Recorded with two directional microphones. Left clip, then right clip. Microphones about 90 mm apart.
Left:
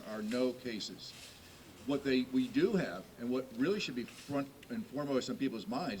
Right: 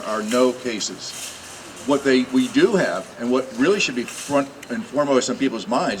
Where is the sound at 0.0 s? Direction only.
15° right (ahead or behind).